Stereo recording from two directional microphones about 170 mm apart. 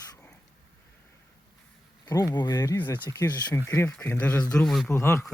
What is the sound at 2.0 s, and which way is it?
Speech, 20° left (ahead or behind).